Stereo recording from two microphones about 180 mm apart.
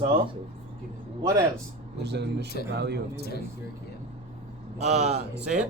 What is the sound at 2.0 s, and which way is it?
Speech, 70° right (ahead or behind).